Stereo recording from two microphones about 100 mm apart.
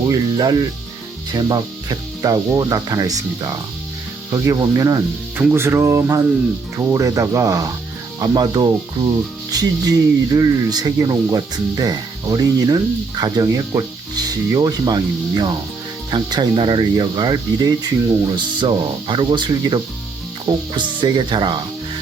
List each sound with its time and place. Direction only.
0.1 s speech: 40° right (ahead or behind)
5.4 s speech: 25° right (ahead or behind); by 21.6 s 50° right (ahead or behind)